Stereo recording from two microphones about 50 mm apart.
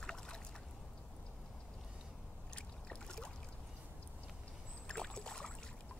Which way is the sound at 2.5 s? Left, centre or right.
Centre.